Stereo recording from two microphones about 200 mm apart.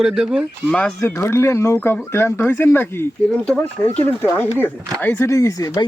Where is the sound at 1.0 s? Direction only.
10° left (ahead or behind).